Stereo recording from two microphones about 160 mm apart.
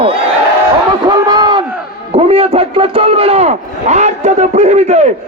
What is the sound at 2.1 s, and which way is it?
A man's voice, 40° right (ahead or behind).